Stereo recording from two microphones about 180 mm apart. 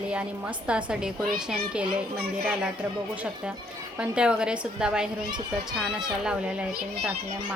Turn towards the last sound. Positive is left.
turn(degrees=-5)  # may be behind; listen again after turning